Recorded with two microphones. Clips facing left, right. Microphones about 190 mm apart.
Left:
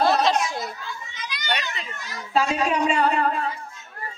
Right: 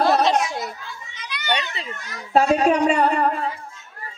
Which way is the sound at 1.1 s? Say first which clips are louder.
Even; 65° right (ahead or behind).